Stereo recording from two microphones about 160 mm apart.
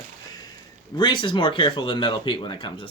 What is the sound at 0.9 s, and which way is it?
Speech, 30° left (ahead or behind).